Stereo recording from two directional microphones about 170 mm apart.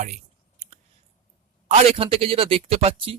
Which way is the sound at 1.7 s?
40° right (ahead or behind).